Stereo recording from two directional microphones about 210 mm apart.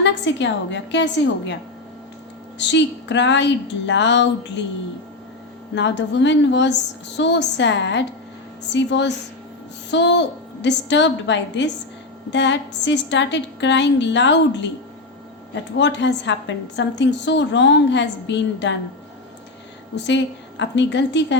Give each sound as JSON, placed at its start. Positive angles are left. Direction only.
{"t": 0.0, "sound": "a woman's voice", "side_deg": 55}
{"t": 2.6, "sound": "a woman's voice", "side_deg": 55}
{"t": 5.7, "sound": "a woman's voice", "side_deg": 55}
{"t": 15.8, "sound": "a woman's voice", "side_deg": 55}
{"t": 20.1, "sound": "a woman's voice", "side_deg": 60}